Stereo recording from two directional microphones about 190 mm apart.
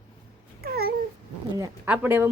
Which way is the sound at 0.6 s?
55° right (ahead or behind).